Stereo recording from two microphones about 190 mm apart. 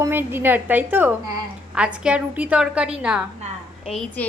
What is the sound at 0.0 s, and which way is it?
A woman's voice, 10° right (ahead or behind).